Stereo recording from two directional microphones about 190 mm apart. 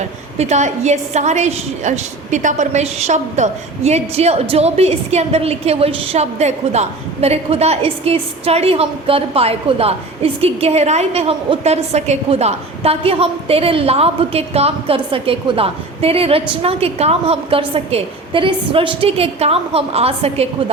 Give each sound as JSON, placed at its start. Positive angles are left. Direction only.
{"t": 0.3, "sound": "a woman's voice", "side_deg": -35}